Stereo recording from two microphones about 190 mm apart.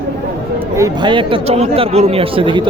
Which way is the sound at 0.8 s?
20° right (ahead or behind).